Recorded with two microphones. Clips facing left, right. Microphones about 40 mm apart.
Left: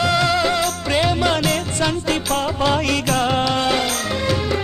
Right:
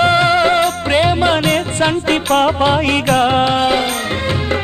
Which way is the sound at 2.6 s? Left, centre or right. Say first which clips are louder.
Right 5 dB; right.